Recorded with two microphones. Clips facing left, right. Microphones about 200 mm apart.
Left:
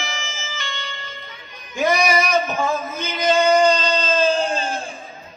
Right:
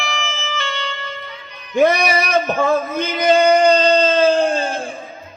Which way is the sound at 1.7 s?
55° right (ahead or behind).